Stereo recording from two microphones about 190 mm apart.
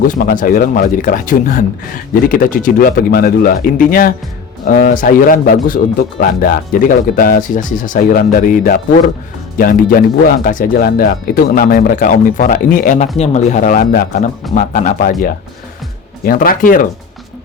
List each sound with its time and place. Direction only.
0.2 s speech: 45° left (ahead or behind)
16.2 s speech: 50° left (ahead or behind)